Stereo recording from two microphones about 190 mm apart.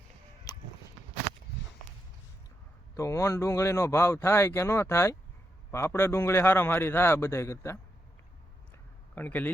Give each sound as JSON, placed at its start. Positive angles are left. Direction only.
{"t": 0.5, "sound": "a sound", "side_deg": 20}
{"t": 2.9, "sound": "speech", "side_deg": 15}
{"t": 9.1, "sound": "speech", "side_deg": 10}